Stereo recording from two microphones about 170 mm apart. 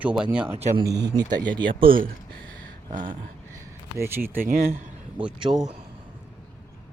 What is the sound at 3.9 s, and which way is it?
Speech, 15° right (ahead or behind).